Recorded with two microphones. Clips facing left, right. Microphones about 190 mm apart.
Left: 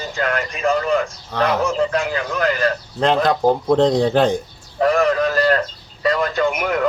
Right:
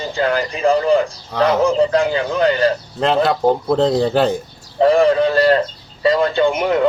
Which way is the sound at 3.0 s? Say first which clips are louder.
Even; centre (ahead or behind).